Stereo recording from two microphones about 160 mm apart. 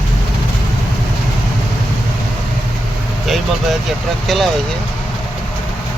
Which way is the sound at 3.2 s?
Centre (ahead or behind).